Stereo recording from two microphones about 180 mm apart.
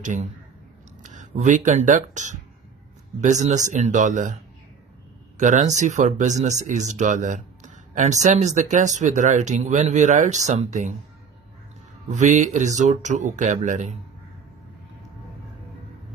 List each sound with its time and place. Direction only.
0.0 s speech: 45° right (ahead or behind)
5.4 s speech: 40° right (ahead or behind)
12.1 s speech: 40° right (ahead or behind)